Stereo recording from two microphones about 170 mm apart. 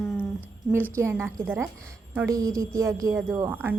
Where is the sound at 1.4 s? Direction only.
10° right (ahead or behind).